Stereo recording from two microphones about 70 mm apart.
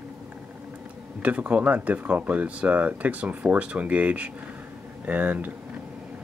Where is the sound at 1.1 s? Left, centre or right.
Centre.